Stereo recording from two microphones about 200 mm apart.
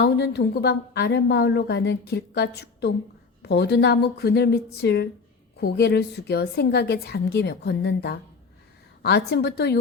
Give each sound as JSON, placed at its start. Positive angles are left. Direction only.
{"t": 0.0, "sound": "a woman's voice", "side_deg": 55}